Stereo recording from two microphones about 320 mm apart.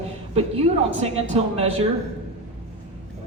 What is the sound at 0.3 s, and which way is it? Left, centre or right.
A woman's voice, centre.